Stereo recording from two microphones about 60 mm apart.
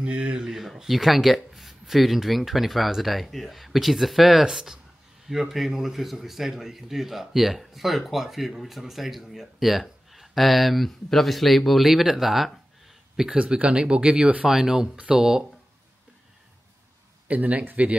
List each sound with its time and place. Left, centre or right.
0.0 s a sound: centre
0.6 s a man's voice: centre
14.5 s speech: centre
17.3 s speech: right